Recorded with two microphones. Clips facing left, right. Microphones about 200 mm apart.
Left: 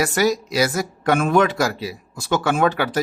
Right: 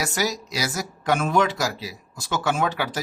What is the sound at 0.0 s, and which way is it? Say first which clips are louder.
Speech: left 7 dB; 55° left (ahead or behind).